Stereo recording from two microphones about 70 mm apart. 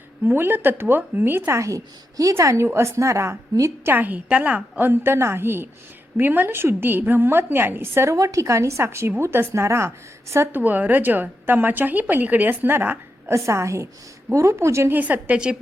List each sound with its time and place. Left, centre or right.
0.3 s a woman's voice: right
1.5 s a woman's voice: right
3.9 s a woman's voice: right
4.8 s a woman's voice: right
8.1 s speech: right
10.5 s a woman's voice: right
13.3 s a woman's voice: right
14.9 s a woman's voice: right